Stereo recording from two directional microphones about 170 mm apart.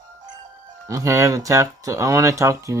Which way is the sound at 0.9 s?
20° right (ahead or behind).